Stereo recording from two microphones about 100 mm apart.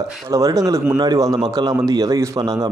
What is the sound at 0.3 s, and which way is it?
Speech, 35° right (ahead or behind).